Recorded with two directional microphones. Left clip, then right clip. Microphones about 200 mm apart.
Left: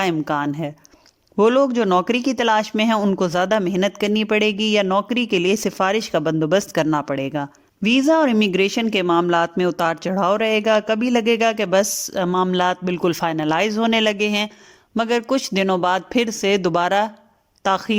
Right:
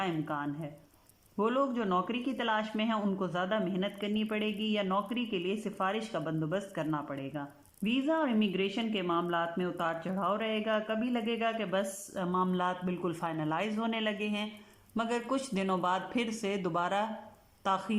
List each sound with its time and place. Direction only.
0.0 s speech: 60° left (ahead or behind)
14.9 s a man's voice: 40° left (ahead or behind)